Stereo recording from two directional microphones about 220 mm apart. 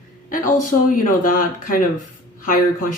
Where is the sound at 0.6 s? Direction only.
35° left (ahead or behind).